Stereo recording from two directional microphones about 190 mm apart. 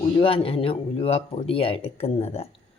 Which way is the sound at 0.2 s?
30° left (ahead or behind).